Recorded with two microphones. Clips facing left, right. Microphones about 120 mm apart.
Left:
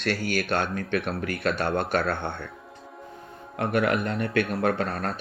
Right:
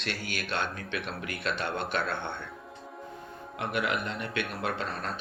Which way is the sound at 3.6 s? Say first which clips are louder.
Left 7 dB; 45° left (ahead or behind).